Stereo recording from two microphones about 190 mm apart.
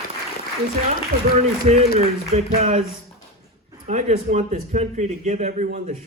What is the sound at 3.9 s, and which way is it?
A man's voice, 35° right (ahead or behind).